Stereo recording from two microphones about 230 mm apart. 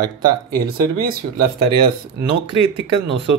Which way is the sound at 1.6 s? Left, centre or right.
Right.